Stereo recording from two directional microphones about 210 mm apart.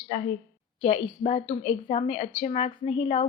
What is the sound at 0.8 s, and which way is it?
A woman's voice, 30° left (ahead or behind).